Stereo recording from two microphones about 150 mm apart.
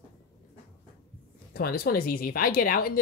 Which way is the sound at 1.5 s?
90° left.